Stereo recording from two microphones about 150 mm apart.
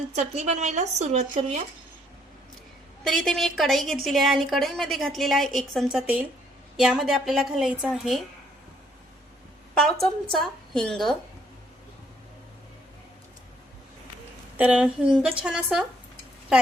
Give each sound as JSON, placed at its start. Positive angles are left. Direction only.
{"t": 0.1, "sound": "speech", "side_deg": -50}
{"t": 3.0, "sound": "a woman's voice", "side_deg": 0}
{"t": 9.7, "sound": "a woman's voice", "side_deg": 5}
{"t": 14.5, "sound": "a woman's voice", "side_deg": -10}